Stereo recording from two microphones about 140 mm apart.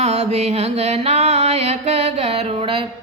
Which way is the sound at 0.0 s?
50° right (ahead or behind).